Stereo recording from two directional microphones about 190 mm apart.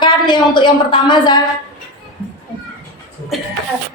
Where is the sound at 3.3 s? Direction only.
Centre (ahead or behind).